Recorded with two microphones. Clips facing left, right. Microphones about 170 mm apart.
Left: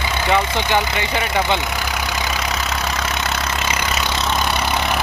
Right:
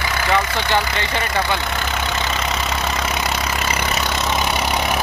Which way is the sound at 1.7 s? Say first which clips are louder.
Right 1 dB; 5° left (ahead or behind).